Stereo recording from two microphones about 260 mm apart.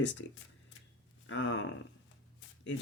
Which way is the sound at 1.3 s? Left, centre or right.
Left.